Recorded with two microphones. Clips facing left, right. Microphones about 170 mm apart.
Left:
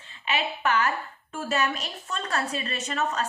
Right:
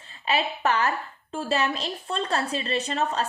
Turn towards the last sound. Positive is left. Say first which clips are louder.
# right 3 dB
turn(degrees=-30)  # may be behind; listen again after turning